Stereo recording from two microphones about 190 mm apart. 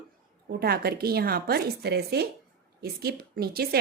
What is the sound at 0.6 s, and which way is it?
A woman's voice, 55° right (ahead or behind).